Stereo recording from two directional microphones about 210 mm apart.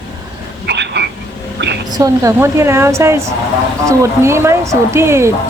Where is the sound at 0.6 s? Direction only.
55° right (ahead or behind).